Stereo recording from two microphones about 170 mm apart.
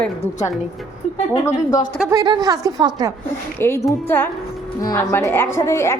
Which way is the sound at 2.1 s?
25° right (ahead or behind).